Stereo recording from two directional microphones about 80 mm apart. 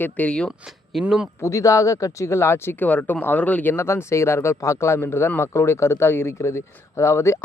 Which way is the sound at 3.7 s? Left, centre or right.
Left.